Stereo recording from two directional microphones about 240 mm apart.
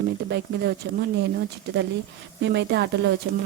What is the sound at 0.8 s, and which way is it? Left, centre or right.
Speech, right.